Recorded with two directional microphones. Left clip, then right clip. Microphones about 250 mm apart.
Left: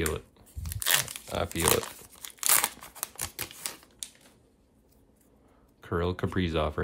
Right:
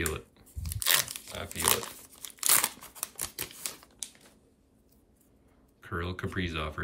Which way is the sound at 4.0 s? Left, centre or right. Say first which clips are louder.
Even; centre.